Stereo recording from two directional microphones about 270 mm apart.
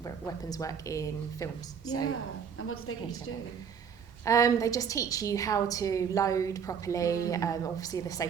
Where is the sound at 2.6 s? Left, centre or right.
Left.